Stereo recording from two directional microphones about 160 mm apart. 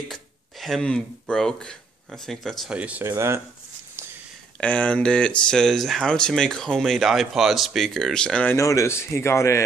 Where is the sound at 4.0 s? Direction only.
15° right (ahead or behind).